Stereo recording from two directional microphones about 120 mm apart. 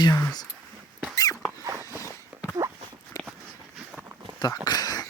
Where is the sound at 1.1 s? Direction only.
30° left (ahead or behind).